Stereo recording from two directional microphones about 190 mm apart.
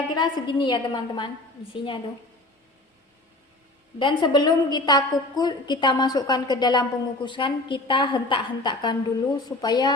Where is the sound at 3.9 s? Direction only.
25° left (ahead or behind).